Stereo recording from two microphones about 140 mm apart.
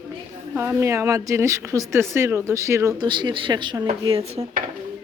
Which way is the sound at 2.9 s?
35° right (ahead or behind).